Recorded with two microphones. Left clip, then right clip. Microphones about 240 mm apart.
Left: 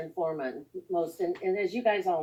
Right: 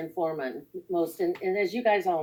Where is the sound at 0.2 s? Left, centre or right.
Right.